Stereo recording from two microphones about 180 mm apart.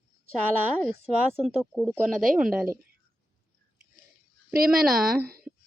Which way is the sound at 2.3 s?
50° right (ahead or behind).